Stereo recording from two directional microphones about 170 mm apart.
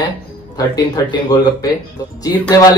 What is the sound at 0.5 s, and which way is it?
Speech, 20° left (ahead or behind).